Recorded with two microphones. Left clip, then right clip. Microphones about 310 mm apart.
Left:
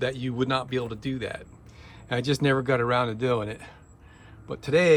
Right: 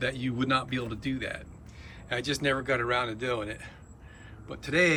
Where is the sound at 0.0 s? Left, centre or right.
Centre.